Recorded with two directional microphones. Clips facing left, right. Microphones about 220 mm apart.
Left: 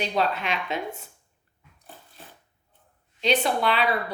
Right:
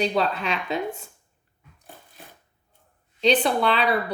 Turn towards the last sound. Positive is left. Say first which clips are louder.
# right 2 dB
turn(degrees=-35)  # may be behind; listen again after turning